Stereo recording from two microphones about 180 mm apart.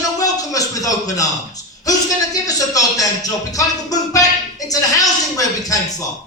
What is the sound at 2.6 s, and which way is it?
Speech, 20° left (ahead or behind).